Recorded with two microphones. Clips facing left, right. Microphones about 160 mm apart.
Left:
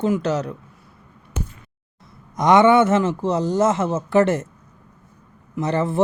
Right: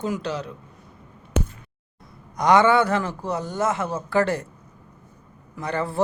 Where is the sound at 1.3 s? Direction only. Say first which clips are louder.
Right 5 dB; 70° right (ahead or behind).